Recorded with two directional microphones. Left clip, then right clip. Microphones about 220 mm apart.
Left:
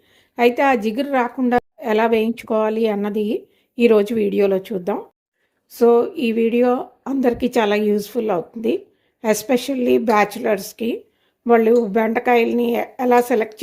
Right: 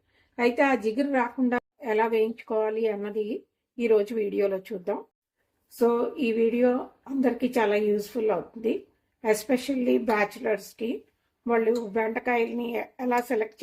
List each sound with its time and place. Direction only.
0.3 s a woman's voice: 35° left (ahead or behind)